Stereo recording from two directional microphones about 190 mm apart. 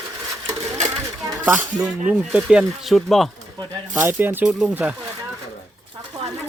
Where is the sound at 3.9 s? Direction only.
10° right (ahead or behind).